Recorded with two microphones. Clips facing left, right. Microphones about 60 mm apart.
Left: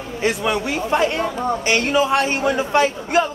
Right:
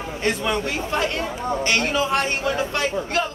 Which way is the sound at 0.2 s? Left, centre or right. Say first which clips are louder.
Left 3 dB; centre.